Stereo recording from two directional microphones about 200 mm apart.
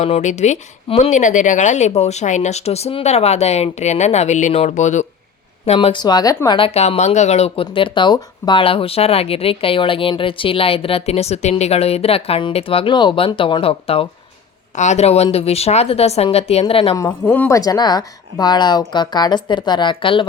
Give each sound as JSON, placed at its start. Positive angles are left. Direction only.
{"t": 0.0, "sound": "speech", "side_deg": 35}
{"t": 17.0, "sound": "speech", "side_deg": 10}